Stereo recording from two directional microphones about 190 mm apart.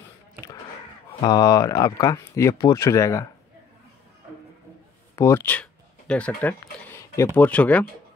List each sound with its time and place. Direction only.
1.2 s speech: 20° left (ahead or behind)
5.1 s speech: 15° left (ahead or behind)